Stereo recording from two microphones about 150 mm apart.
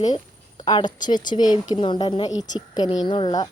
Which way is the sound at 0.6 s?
30° left (ahead or behind).